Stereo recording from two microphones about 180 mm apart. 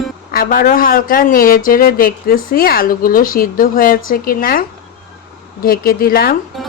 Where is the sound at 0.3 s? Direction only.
50° left (ahead or behind).